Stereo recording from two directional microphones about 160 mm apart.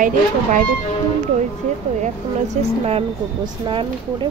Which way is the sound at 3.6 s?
30° right (ahead or behind).